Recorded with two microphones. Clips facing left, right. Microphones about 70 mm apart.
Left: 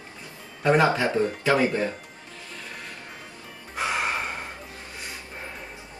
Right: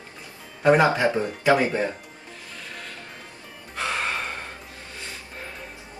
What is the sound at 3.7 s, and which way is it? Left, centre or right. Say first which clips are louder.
Music: left 1 dB; centre.